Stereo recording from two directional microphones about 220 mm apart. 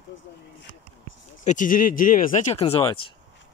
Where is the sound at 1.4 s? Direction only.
35° left (ahead or behind).